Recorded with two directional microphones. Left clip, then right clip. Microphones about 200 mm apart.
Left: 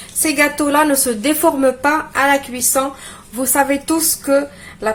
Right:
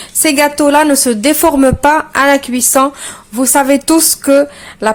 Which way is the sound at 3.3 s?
35° right (ahead or behind).